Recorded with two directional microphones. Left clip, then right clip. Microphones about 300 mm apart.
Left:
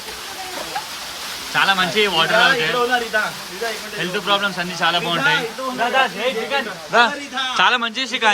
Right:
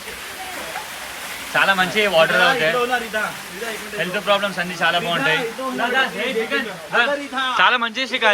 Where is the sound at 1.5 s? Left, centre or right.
Centre.